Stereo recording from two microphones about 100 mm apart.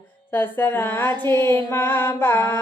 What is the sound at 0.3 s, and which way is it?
Music, 20° left (ahead or behind).